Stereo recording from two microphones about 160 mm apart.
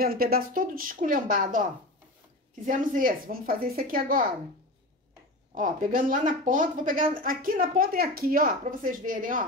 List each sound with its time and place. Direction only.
0.0 s speech: 70° right (ahead or behind)
2.6 s speech: 55° right (ahead or behind)
5.5 s speech: 55° right (ahead or behind)